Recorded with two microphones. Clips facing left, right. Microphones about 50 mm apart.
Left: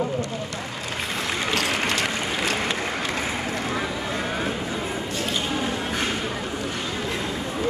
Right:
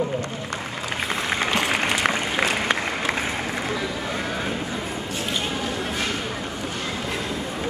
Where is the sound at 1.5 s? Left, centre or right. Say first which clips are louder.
Even; centre.